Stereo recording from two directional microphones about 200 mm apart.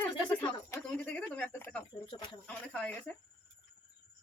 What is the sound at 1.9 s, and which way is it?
Speech, 20° left (ahead or behind).